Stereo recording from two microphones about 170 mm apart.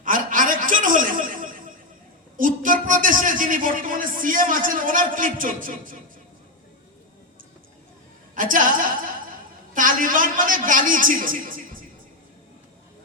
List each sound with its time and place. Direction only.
0.0 s chuckle: 50° right (ahead or behind)
2.4 s a man's voice: 50° right (ahead or behind)
8.4 s a man's voice: 50° right (ahead or behind)